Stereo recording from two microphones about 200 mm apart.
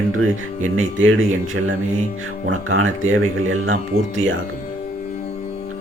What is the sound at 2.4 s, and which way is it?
Speech, 90° right.